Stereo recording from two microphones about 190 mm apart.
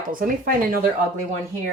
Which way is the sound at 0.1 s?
50° right (ahead or behind).